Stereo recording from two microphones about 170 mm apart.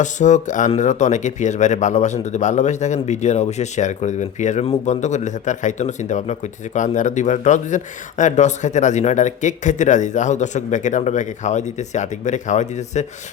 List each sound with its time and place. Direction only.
0.0 s a man's voice: 45° left (ahead or behind)